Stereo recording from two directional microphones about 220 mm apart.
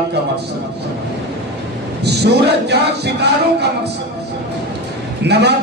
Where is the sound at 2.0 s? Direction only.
50° right (ahead or behind).